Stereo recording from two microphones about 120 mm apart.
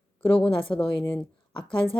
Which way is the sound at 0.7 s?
40° left (ahead or behind).